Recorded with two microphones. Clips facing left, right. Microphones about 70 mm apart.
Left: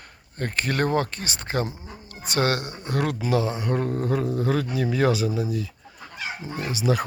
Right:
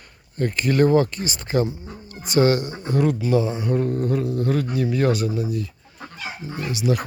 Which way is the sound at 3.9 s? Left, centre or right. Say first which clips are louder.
Right 2 dB; centre.